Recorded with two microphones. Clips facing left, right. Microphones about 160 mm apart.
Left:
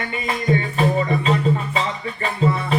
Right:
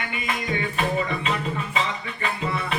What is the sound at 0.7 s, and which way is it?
Music, 35° left (ahead or behind).